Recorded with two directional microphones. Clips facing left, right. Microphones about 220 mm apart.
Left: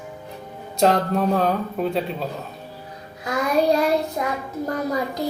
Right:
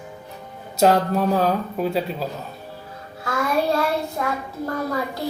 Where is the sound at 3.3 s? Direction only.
15° left (ahead or behind).